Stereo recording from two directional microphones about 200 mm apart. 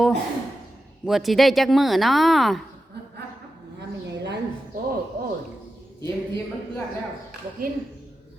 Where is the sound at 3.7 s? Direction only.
60° right (ahead or behind).